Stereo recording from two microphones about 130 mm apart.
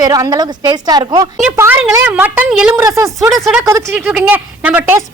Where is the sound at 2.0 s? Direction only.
15° right (ahead or behind).